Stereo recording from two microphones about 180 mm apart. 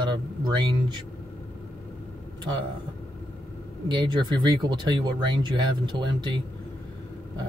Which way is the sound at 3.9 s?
25° right (ahead or behind).